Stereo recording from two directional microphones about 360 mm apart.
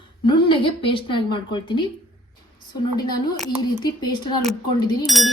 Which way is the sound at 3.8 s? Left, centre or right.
Centre.